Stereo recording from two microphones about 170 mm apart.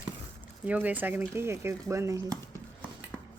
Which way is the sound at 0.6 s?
10° right (ahead or behind).